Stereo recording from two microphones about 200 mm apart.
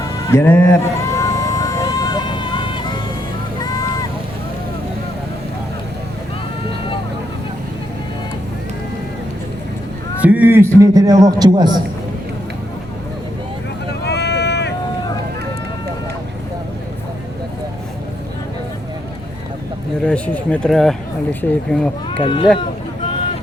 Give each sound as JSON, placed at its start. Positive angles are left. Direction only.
{"t": 0.3, "sound": "a sound", "side_deg": 15}
{"t": 3.6, "sound": "vehicle", "side_deg": 20}
{"t": 10.2, "sound": "a man's voice", "side_deg": -10}
{"t": 14.0, "sound": "vehicle", "side_deg": 55}
{"t": 20.1, "sound": "speech", "side_deg": 5}
{"t": 22.2, "sound": "speech", "side_deg": 25}